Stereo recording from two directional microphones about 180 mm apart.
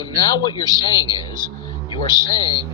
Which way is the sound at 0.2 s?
25° left (ahead or behind).